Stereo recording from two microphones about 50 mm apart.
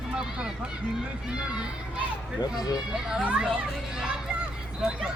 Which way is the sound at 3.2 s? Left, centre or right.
Right.